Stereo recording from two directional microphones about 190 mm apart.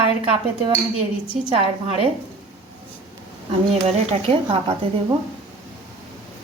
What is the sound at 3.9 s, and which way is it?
Speech, 30° right (ahead or behind).